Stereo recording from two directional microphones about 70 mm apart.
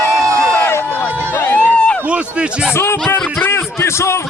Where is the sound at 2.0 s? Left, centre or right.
Centre.